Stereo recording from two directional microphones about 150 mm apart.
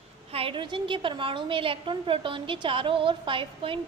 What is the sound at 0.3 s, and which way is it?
A woman's voice, 35° right (ahead or behind).